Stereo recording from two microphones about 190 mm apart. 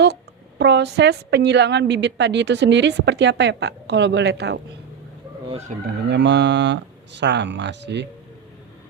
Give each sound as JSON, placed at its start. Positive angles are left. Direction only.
{"t": 0.6, "sound": "a woman's voice", "side_deg": -65}
{"t": 5.5, "sound": "chicken", "side_deg": -35}
{"t": 5.8, "sound": "speech", "side_deg": -65}